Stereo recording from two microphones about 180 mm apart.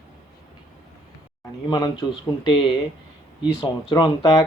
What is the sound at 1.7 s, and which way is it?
Speech, 20° left (ahead or behind).